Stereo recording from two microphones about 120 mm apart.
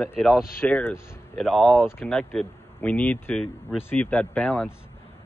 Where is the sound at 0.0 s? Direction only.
Centre (ahead or behind).